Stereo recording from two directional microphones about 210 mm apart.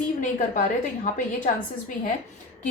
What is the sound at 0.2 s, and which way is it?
Speech, 35° left (ahead or behind).